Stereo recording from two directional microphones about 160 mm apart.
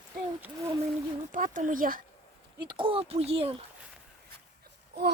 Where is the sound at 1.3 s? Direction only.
55° right (ahead or behind).